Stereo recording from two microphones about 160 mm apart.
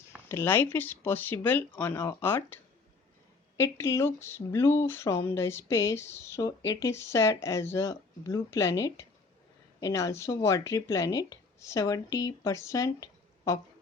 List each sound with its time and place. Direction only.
0.3 s speech: 15° left (ahead or behind)
3.6 s speech: 15° left (ahead or behind)